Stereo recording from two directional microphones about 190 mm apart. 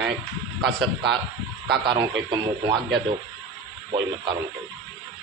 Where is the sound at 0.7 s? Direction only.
65° right (ahead or behind).